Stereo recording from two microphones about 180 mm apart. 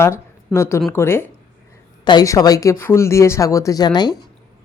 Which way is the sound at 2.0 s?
25° left (ahead or behind).